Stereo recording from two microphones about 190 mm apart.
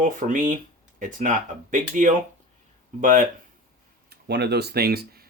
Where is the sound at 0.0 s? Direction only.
45° right (ahead or behind).